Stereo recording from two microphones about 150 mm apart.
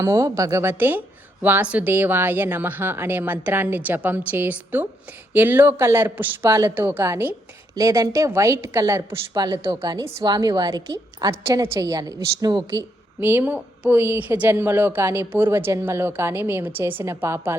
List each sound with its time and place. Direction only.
0.0 s a woman's voice: 20° right (ahead or behind)
13.1 s a woman's voice: 15° right (ahead or behind)